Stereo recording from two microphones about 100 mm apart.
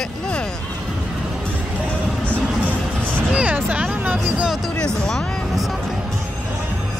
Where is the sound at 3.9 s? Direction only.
20° right (ahead or behind).